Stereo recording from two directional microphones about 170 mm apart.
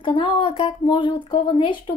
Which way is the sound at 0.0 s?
30° left (ahead or behind).